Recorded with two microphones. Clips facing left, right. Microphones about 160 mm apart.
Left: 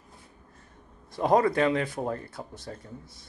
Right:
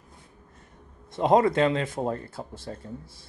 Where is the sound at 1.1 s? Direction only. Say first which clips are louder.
Right 2 dB; 25° right (ahead or behind).